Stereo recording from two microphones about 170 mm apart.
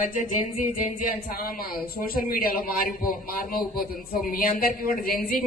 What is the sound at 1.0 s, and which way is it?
A man's voice, 60° left (ahead or behind).